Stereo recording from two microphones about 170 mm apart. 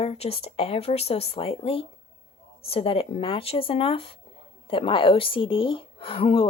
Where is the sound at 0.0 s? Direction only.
35° left (ahead or behind).